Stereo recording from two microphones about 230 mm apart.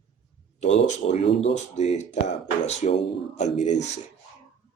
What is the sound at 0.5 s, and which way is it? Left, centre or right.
Speech, left.